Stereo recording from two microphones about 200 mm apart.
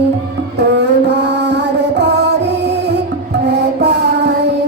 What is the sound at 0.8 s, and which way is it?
Music, 60° right (ahead or behind).